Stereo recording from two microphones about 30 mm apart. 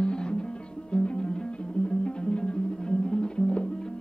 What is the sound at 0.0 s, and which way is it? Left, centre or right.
Music, left.